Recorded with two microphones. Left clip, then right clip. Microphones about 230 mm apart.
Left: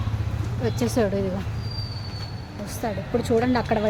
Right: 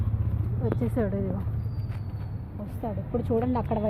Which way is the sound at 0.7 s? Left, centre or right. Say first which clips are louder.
Left 8 dB; left.